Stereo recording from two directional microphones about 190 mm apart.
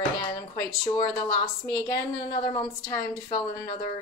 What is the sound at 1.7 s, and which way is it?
A woman's voice, 20° left (ahead or behind).